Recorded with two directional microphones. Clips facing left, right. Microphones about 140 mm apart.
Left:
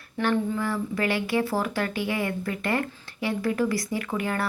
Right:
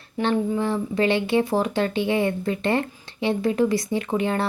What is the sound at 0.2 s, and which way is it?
Speech, 25° right (ahead or behind).